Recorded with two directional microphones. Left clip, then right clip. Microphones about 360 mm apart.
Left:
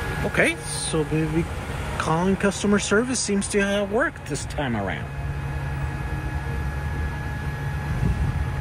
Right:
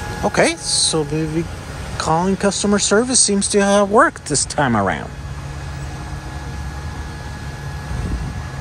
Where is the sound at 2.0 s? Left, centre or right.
Centre.